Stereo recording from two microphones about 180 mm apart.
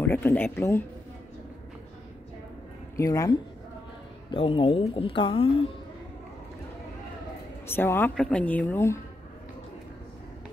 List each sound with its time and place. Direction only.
0.0 s speech: 10° left (ahead or behind)
3.0 s speech: 20° left (ahead or behind)
4.3 s speech: 30° left (ahead or behind)
7.6 s speech: 10° left (ahead or behind)